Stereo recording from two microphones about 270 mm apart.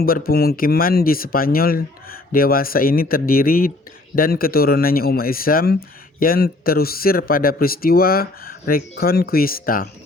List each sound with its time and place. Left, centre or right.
0.0 s speech: left